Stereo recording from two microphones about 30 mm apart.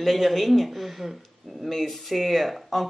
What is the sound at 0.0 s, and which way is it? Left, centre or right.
Speech, centre.